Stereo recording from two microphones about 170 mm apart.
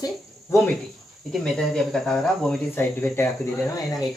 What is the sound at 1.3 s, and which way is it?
Speech, 5° left (ahead or behind).